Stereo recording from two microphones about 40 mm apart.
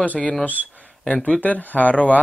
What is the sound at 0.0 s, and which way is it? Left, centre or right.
Speech, left.